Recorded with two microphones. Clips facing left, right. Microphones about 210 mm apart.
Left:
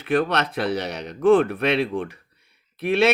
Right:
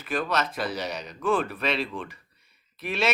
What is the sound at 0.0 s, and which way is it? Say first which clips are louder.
Speech: left 6 dB; 60° left (ahead or behind).